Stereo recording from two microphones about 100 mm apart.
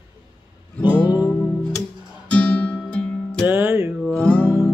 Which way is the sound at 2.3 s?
15° left (ahead or behind).